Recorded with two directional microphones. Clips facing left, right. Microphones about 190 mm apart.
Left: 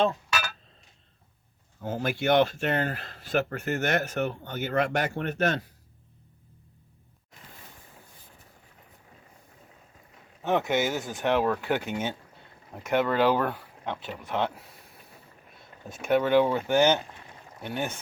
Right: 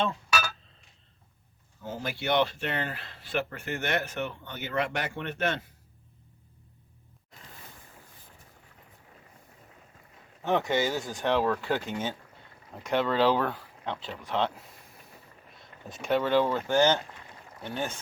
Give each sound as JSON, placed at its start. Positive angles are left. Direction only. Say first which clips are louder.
{"t": 1.8, "sound": "speech", "louder": "left 6 dB", "side_deg": 50}
{"t": 10.4, "sound": "speech", "louder": "left 1 dB", "side_deg": 20}
{"t": 11.4, "sound": "speech", "louder": "left 1 dB", "side_deg": 5}
{"t": 15.5, "sound": "a sound", "louder": "left 1 dB", "side_deg": 5}
{"t": 16.0, "sound": "speech", "louder": "left 3 dB", "side_deg": 15}